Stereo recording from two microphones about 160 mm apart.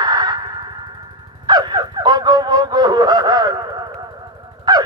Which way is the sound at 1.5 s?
25° right (ahead or behind).